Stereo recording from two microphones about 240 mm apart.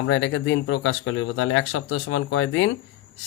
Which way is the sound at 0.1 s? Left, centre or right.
Left.